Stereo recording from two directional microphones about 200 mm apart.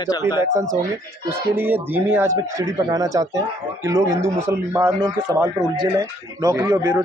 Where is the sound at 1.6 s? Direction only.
10° right (ahead or behind).